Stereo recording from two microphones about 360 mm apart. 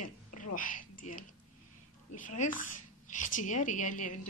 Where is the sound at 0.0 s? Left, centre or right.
Left.